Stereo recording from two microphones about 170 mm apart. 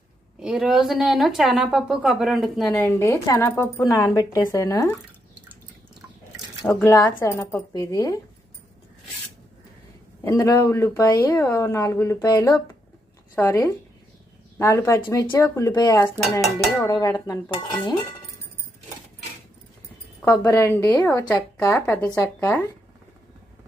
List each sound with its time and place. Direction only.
0.3 s a woman's voice: 5° right (ahead or behind)
2.7 s speech: 15° left (ahead or behind)
6.7 s a woman's voice: 15° left (ahead or behind)
10.2 s a woman's voice: 20° left (ahead or behind)
20.2 s a woman's voice: 20° left (ahead or behind)